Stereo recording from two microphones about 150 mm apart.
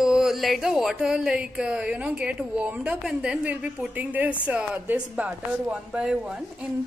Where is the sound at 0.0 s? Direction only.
5° right (ahead or behind).